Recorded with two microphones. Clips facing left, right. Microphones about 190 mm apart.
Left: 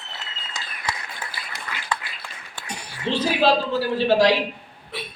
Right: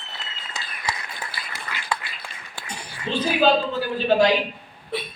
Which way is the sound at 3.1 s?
80° left.